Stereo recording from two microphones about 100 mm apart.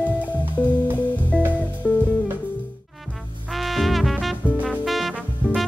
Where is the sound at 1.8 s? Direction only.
10° left (ahead or behind).